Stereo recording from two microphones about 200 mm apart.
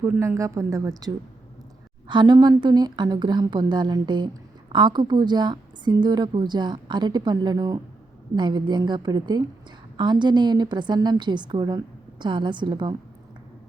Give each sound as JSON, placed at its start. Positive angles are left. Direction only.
{"t": 0.0, "sound": "a woman's voice", "side_deg": -15}